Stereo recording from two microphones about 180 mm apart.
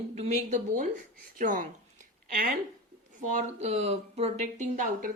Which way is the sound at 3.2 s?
40° right (ahead or behind).